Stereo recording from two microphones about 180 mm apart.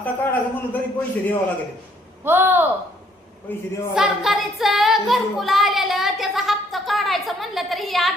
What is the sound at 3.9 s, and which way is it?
Speech, centre (ahead or behind).